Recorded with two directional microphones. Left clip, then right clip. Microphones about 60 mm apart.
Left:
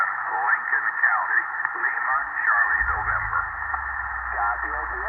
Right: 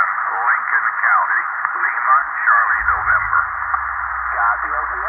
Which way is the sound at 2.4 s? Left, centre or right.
Right.